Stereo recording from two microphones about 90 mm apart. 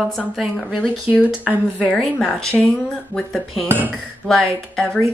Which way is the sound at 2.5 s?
10° left (ahead or behind).